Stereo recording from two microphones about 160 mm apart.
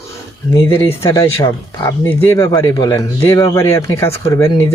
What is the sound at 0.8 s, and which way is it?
Speech, 15° left (ahead or behind).